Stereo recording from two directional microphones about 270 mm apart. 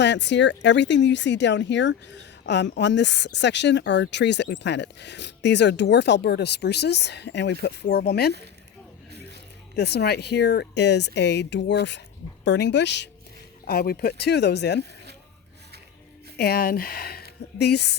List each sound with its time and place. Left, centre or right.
0.0 s speech: left
9.7 s speech: left
16.4 s speech: left